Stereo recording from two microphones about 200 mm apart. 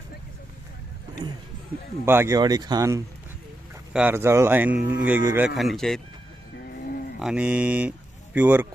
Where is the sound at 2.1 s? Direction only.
15° right (ahead or behind).